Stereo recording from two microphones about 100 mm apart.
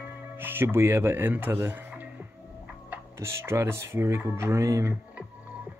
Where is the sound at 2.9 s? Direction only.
25° right (ahead or behind).